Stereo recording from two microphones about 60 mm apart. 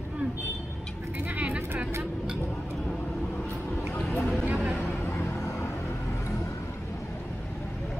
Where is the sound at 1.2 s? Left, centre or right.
Right.